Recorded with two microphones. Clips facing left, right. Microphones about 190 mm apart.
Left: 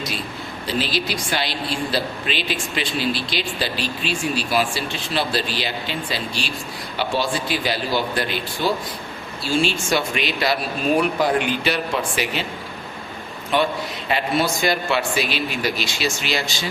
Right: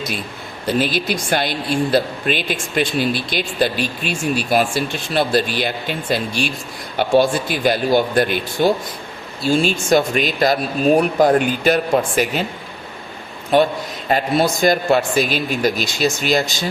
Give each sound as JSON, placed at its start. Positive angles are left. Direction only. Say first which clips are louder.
{"t": 0.7, "sound": "speech", "louder": "right 5 dB", "side_deg": -50}
{"t": 13.5, "sound": "speech", "louder": "right 5 dB", "side_deg": -45}